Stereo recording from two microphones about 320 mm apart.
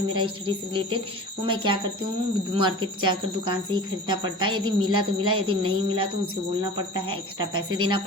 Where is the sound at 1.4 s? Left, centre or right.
Centre.